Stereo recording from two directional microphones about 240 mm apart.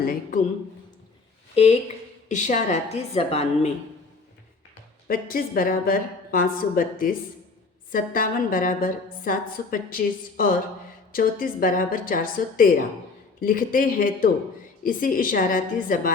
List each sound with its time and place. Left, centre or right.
2.3 s a woman's voice: left
5.0 s a woman's voice: left